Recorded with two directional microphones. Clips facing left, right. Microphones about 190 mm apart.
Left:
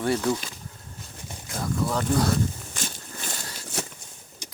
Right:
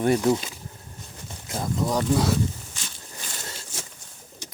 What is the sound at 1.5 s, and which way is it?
Speech, 20° right (ahead or behind).